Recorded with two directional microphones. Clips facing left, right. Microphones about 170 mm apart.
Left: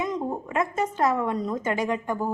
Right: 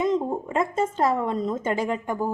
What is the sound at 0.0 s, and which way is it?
A woman's voice, 25° right (ahead or behind).